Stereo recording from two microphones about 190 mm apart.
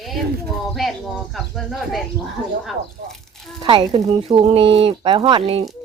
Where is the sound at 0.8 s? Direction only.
Centre (ahead or behind).